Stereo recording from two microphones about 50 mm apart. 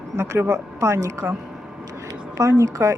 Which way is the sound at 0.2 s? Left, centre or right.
Right.